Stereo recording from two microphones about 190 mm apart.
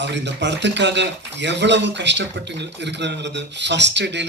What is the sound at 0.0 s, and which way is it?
A man's voice, 65° right (ahead or behind).